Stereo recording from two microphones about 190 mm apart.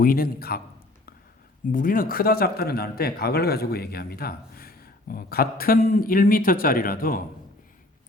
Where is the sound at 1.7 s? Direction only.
45° left (ahead or behind).